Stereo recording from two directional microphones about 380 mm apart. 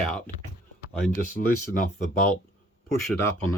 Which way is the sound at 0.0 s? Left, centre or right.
Centre.